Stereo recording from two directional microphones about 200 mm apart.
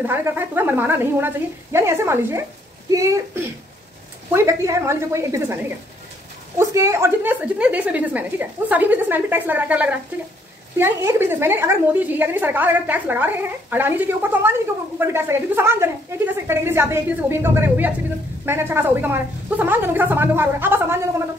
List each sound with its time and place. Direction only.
0.0 s a woman's voice: 10° right (ahead or behind)